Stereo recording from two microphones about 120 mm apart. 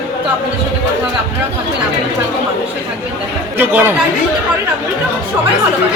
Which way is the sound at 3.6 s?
15° right (ahead or behind).